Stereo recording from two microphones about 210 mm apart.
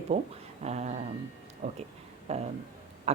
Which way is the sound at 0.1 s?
30° right (ahead or behind).